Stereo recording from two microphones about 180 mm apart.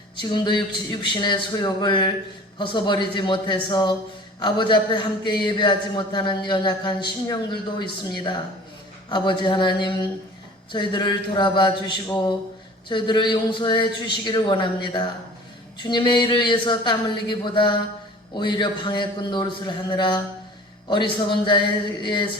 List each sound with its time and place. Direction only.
0.2 s speech: 25° left (ahead or behind)